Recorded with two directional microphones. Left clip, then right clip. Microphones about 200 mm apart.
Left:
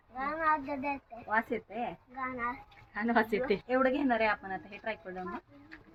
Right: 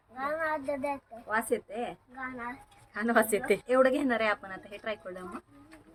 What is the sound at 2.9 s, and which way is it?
Speech, 50° right (ahead or behind).